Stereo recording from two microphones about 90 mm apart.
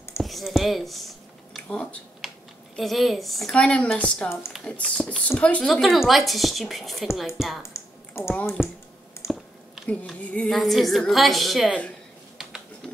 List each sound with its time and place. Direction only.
0.2 s speech: centre (ahead or behind)
1.7 s speech: 10° left (ahead or behind)
2.2 s typing: centre (ahead or behind)
2.7 s a woman's voice: centre (ahead or behind)
3.5 s a woman's voice: 15° left (ahead or behind); by 7.6 s 5° right (ahead or behind)
7.7 s typing: 30° left (ahead or behind)
9.3 s a sound: 5° left (ahead or behind)
10.5 s a woman's voice: centre (ahead or behind)